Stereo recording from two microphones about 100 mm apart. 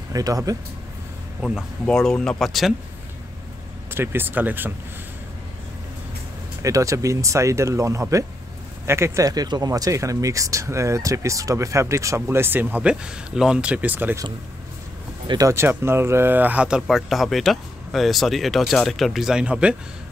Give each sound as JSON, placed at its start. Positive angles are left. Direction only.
{"t": 0.1, "sound": "speech", "side_deg": -35}
{"t": 1.9, "sound": "speech", "side_deg": 5}
{"t": 3.9, "sound": "speech", "side_deg": -20}
{"t": 6.6, "sound": "speech", "side_deg": -35}
{"t": 15.4, "sound": "speech", "side_deg": -25}